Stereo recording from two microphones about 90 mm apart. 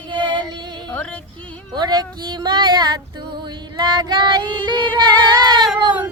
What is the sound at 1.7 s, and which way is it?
Speech, 50° right (ahead or behind).